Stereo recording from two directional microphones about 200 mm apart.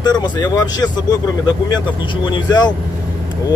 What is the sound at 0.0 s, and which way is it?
Speech, 20° left (ahead or behind).